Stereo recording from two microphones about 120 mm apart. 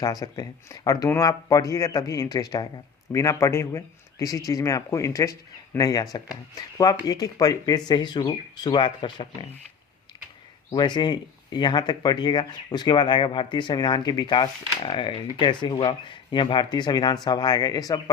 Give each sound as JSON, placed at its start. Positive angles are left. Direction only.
{"t": 0.0, "sound": "speech", "side_deg": 30}
{"t": 10.8, "sound": "speech", "side_deg": 40}